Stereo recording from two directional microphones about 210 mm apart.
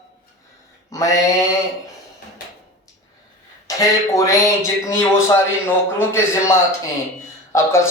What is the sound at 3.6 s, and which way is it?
Speech, 15° left (ahead or behind).